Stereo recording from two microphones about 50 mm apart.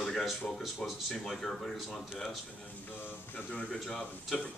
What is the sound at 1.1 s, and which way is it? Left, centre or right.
Speech, centre.